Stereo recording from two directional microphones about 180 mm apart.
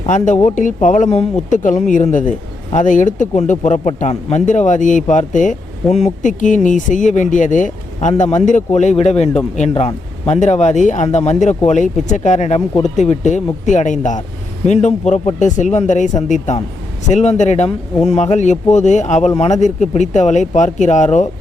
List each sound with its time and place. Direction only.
0.0 s speech: 40° left (ahead or behind)